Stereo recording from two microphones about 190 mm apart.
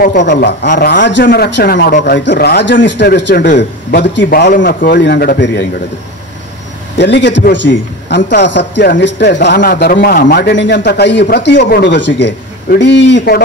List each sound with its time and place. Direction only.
0.2 s a man's voice: 60° left (ahead or behind)
2.1 s a man's voice: 60° left (ahead or behind)
7.0 s a man's voice: 65° left (ahead or behind)
9.6 s a man's voice: 50° left (ahead or behind)